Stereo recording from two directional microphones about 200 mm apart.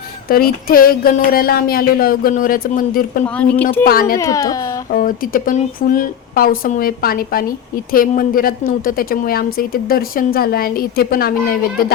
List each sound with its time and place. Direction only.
0.3 s a woman's voice: 45° left (ahead or behind)
3.2 s speech: 5° left (ahead or behind)
4.9 s a woman's voice: 45° left (ahead or behind)